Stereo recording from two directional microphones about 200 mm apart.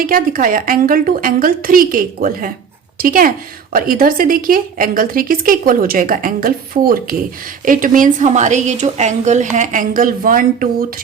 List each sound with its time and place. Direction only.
0.0 s a woman's voice: 45° right (ahead or behind)